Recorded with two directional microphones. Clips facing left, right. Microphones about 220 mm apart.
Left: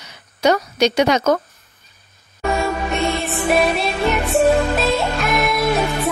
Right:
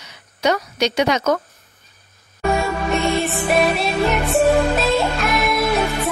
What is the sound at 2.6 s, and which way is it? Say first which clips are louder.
Music: even; centre (ahead or behind).